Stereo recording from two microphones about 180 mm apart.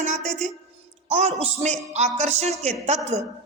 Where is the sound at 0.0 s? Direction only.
40° right (ahead or behind).